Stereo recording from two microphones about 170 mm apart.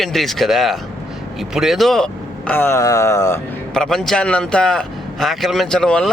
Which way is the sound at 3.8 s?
Centre (ahead or behind).